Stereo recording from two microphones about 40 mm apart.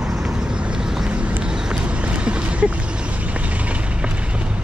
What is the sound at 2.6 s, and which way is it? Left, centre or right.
Speech, right.